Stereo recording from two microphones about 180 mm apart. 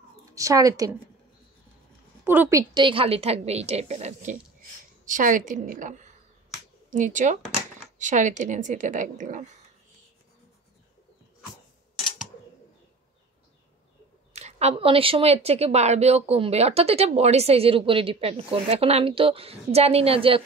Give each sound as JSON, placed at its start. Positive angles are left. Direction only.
{"t": 0.3, "sound": "a woman's voice", "side_deg": -20}
{"t": 2.2, "sound": "a woman's voice", "side_deg": -10}
{"t": 2.7, "sound": "a woman's voice", "side_deg": -30}
{"t": 14.3, "sound": "a woman's voice", "side_deg": -35}